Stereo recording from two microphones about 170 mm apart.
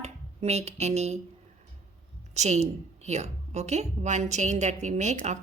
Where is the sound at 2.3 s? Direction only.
40° right (ahead or behind).